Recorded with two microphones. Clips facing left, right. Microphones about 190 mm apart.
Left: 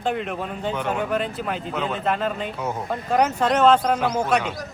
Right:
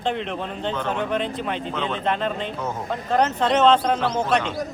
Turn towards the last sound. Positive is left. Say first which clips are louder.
# even
turn(degrees=10)  # may be behind; listen again after turning